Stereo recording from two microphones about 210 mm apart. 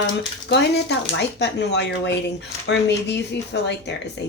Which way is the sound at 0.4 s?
55° left (ahead or behind).